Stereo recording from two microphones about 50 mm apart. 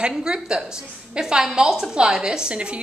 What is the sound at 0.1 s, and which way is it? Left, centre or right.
A woman's voice, centre.